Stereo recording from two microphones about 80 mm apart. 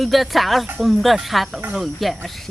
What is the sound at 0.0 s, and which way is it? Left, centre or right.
Speech, centre.